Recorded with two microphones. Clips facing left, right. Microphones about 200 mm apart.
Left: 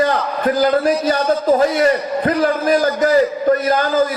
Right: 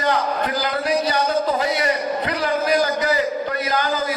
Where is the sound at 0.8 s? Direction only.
50° left (ahead or behind).